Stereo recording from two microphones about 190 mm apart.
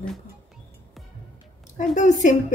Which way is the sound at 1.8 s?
40° left (ahead or behind).